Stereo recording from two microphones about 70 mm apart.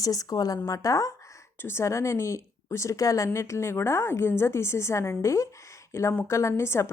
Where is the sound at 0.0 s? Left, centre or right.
Left.